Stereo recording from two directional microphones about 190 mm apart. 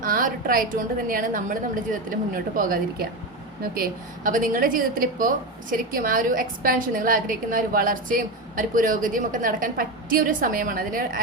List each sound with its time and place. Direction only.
0.0 s a woman's voice: 45° right (ahead or behind)